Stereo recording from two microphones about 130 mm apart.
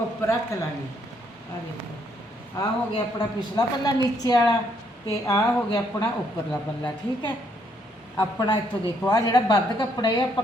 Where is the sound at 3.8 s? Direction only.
30° left (ahead or behind).